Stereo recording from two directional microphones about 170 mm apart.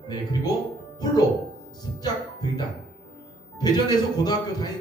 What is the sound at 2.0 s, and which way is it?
Speech, 25° left (ahead or behind).